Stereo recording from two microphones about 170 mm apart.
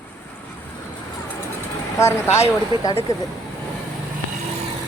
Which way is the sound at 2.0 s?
15° left (ahead or behind).